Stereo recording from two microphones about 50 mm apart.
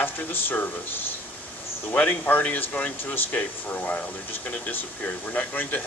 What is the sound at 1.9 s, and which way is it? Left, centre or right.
Speech, left.